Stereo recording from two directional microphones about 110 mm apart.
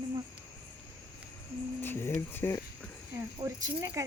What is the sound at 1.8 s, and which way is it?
Speech, 20° left (ahead or behind).